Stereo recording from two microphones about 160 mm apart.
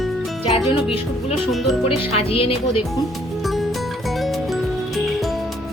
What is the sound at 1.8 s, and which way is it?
Speech, 35° left (ahead or behind).